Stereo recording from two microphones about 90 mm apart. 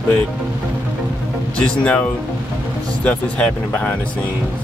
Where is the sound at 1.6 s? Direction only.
15° left (ahead or behind).